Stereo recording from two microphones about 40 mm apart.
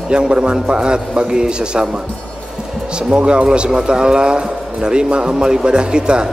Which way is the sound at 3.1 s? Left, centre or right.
Right.